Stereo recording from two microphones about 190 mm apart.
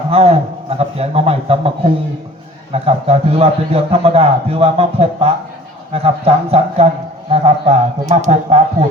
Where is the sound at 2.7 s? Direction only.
30° right (ahead or behind).